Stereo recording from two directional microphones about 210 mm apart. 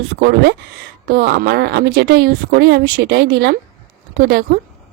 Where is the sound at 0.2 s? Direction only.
55° right (ahead or behind).